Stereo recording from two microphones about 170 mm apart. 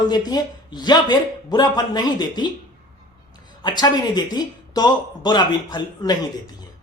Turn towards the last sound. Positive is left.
turn(degrees=25)  # may be behind; listen again after turning